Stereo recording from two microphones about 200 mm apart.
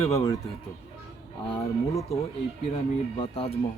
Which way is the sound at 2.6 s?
30° left (ahead or behind).